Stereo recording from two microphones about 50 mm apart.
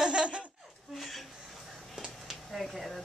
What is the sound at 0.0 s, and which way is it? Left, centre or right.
Laughter, right.